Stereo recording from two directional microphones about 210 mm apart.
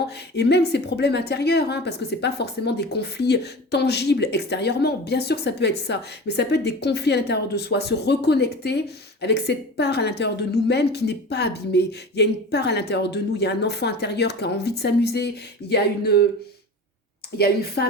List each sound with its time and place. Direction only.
0.3 s a woman's voice: 50° left (ahead or behind)
17.3 s a woman's voice: 50° left (ahead or behind)